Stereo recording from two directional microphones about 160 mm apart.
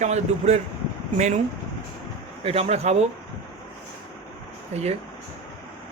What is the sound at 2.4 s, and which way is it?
Speech, 40° right (ahead or behind).